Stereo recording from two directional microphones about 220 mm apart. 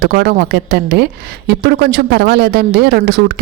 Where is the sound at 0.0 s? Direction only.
45° right (ahead or behind).